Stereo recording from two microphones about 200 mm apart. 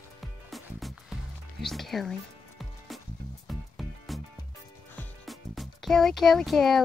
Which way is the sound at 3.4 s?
Centre (ahead or behind).